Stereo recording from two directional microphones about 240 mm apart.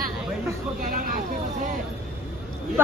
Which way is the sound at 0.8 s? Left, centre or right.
Right.